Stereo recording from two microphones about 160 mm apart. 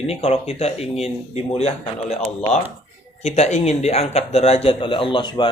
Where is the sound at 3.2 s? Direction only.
40° left (ahead or behind).